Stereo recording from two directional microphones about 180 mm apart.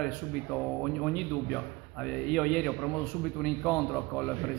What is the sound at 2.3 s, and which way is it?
A man's voice, 5° left (ahead or behind).